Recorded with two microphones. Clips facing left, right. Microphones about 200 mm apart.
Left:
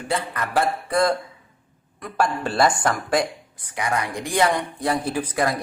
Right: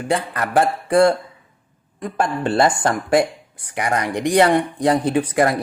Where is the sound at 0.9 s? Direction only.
30° right (ahead or behind).